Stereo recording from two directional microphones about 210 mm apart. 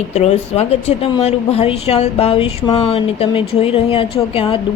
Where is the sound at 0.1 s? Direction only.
30° left (ahead or behind).